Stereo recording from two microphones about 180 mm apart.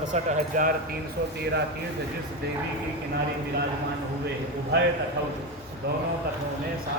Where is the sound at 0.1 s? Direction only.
45° right (ahead or behind).